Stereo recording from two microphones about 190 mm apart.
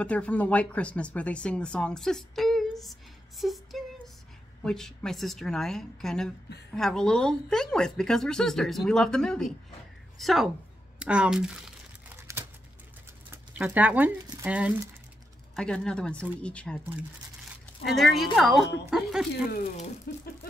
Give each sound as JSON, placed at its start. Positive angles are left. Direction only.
{"t": 0.0, "sound": "a woman's voice", "side_deg": 5}
{"t": 12.2, "sound": "a sound", "side_deg": -15}
{"t": 13.3, "sound": "speech", "side_deg": -10}
{"t": 15.5, "sound": "a woman's voice", "side_deg": 5}
{"t": 17.8, "sound": "a woman's voice", "side_deg": 0}
{"t": 20.1, "sound": "a sound", "side_deg": 55}